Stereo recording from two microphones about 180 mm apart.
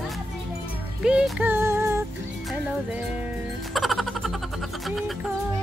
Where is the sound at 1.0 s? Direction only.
5° right (ahead or behind).